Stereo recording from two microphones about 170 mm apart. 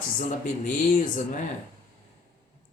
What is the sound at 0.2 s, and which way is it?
Speech, 50° left (ahead or behind).